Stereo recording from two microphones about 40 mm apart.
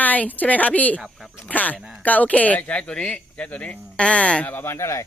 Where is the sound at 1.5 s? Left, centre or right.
Left.